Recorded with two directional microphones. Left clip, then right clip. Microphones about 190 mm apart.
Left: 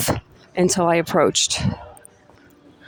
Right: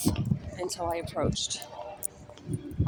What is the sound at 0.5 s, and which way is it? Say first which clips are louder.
Speech: left 15 dB; 40° left (ahead or behind).